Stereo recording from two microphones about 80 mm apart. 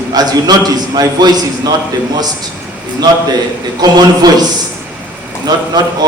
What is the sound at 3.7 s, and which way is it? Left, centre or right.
Speech, right.